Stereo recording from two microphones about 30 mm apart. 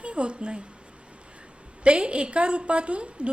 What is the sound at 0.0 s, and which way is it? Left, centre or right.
Speech, right.